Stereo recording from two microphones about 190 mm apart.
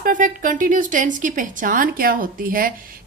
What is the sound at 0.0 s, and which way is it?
Speech, 45° right (ahead or behind).